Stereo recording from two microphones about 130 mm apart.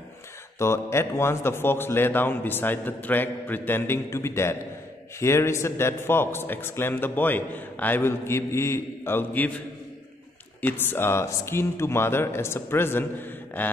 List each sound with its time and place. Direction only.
0.6 s a man's voice: 20° left (ahead or behind)
10.6 s speech: 15° left (ahead or behind)